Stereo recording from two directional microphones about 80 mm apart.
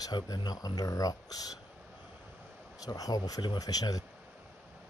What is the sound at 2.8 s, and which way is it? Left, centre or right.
Speech, left.